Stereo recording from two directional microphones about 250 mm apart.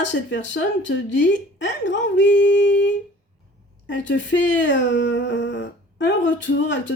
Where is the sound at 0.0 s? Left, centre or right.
Left.